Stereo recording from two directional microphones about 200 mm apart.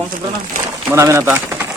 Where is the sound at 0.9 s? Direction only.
15° right (ahead or behind).